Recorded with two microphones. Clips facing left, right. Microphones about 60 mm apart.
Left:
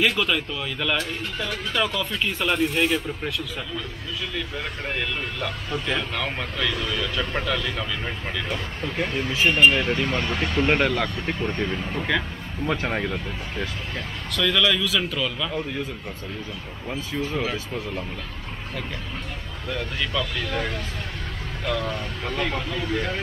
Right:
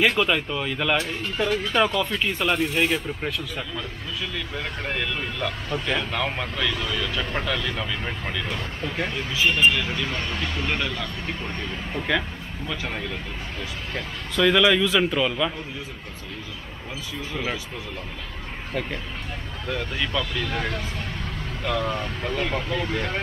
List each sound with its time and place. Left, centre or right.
0.0 s a man's voice: centre
0.9 s speech: right
2.3 s speech: centre
9.3 s speech: left
10.1 s speech: centre
10.4 s speech: left
11.9 s speech: centre
12.6 s speech: left
14.3 s a man's voice: centre
19.7 s speech: centre
21.8 s speech: right
22.8 s speech: centre